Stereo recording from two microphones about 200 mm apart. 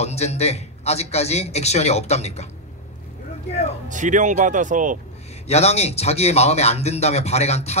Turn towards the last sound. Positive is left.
turn(degrees=30)  # may be behind; listen again after turning